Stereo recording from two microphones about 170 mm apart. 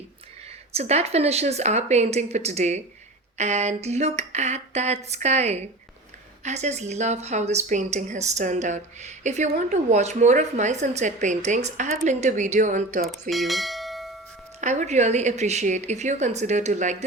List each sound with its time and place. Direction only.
0.7 s a sound: 40° right (ahead or behind)
6.4 s speech: 40° right (ahead or behind)
13.3 s bell: centre (ahead or behind)
14.6 s speech: 45° right (ahead or behind)